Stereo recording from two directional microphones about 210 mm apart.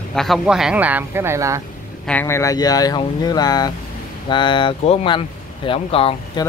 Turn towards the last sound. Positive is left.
turn(degrees=25)  # may be behind; listen again after turning